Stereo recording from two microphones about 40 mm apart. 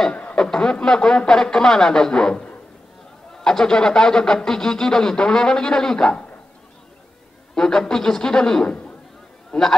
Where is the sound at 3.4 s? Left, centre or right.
Centre.